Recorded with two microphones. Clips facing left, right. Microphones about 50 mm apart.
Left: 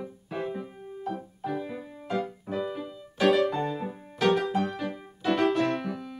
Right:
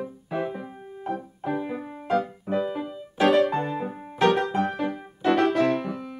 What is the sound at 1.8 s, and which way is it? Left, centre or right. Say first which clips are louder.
Music: right 6 dB; right.